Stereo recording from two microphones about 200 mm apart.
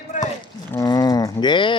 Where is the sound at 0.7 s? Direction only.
20° left (ahead or behind).